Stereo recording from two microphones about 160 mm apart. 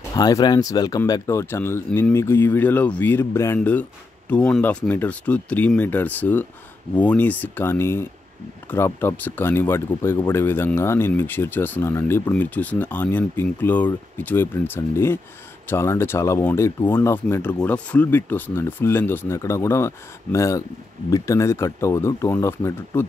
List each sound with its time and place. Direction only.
0.1 s speech: 25° left (ahead or behind)